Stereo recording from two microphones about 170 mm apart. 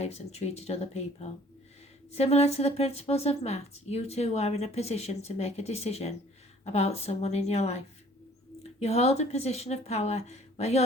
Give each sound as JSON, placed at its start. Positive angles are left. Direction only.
{"t": 0.0, "sound": "a woman's voice", "side_deg": 40}
{"t": 8.8, "sound": "a woman's voice", "side_deg": 40}